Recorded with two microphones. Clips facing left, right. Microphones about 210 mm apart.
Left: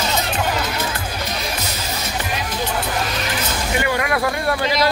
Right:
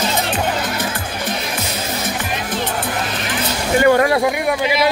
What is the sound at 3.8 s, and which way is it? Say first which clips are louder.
Speech: right 11 dB; 45° right (ahead or behind).